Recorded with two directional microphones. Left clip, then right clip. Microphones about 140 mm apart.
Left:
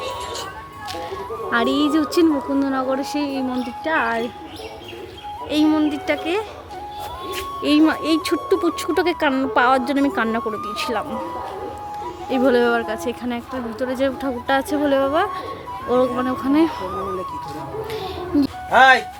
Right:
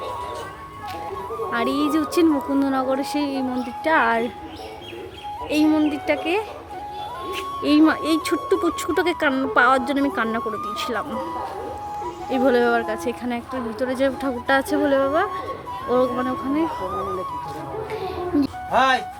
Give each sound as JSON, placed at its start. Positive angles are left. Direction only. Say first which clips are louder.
{"t": 1.5, "sound": "speech", "louder": "left 4 dB", "side_deg": 20}
{"t": 2.2, "sound": "speech", "louder": "left 1 dB", "side_deg": 0}
{"t": 3.8, "sound": "speech", "louder": "right 2 dB", "side_deg": -15}
{"t": 5.5, "sound": "speech", "louder": "left 1 dB", "side_deg": 0}
{"t": 7.6, "sound": "speech", "louder": "even", "side_deg": -5}
{"t": 8.0, "sound": "speech", "louder": "left 1 dB", "side_deg": 5}
{"t": 12.3, "sound": "speech", "louder": "left 1 dB", "side_deg": 5}
{"t": 17.9, "sound": "a sound", "louder": "left 1 dB", "side_deg": 5}